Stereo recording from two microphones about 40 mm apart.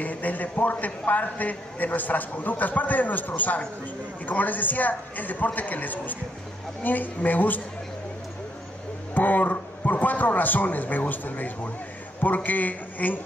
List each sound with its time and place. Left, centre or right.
0.0 s a man's voice: left
9.1 s a man's voice: left